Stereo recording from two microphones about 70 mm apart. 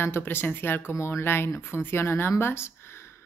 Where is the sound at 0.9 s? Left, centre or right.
Left.